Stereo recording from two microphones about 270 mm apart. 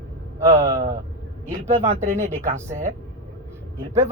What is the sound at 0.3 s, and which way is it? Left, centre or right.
Speech, centre.